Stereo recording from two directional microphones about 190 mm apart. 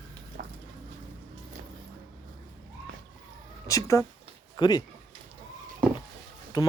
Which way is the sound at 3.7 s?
15° left (ahead or behind).